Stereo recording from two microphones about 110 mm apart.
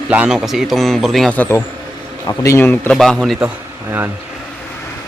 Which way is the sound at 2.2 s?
30° left (ahead or behind).